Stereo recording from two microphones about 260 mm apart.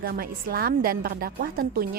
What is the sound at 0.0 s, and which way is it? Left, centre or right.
A woman's voice, right.